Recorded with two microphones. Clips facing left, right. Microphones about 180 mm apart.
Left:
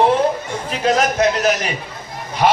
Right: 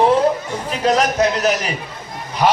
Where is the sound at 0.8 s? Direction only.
35° right (ahead or behind).